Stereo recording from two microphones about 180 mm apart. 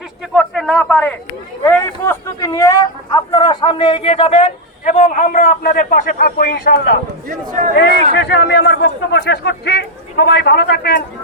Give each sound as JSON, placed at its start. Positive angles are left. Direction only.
{"t": 0.3, "sound": "a sound", "side_deg": 0}
{"t": 1.6, "sound": "a man's voice", "side_deg": 10}
{"t": 4.9, "sound": "a man's voice", "side_deg": 40}
{"t": 7.3, "sound": "speech", "side_deg": -45}
{"t": 8.1, "sound": "a man's voice", "side_deg": 70}